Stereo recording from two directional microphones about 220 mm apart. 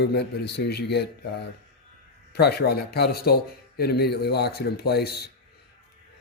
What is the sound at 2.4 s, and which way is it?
Speech, 45° left (ahead or behind).